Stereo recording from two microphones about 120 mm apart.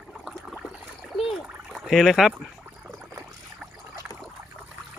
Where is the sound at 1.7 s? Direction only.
Centre (ahead or behind).